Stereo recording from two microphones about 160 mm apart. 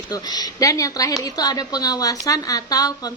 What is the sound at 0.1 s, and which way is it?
A woman's voice, 25° left (ahead or behind).